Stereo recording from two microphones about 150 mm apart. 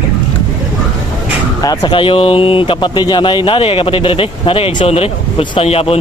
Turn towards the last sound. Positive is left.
turn(degrees=40)  # may be behind; listen again after turning